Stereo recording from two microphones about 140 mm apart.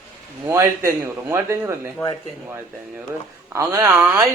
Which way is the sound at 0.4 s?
20° right (ahead or behind).